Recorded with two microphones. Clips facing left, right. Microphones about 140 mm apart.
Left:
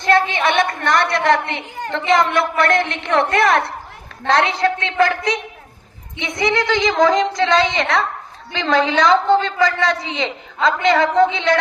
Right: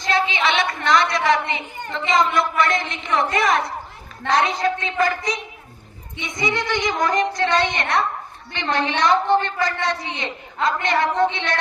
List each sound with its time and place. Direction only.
0.0 s a sound: 55° left (ahead or behind); by 2.0 s 80° left
2.0 s a man's voice: 65° left (ahead or behind); by 8.0 s 90° left
9.4 s a man's voice: 90° left